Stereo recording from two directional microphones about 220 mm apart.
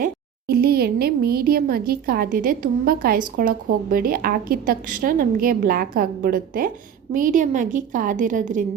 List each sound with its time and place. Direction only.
0.0 s speech: 45° right (ahead or behind)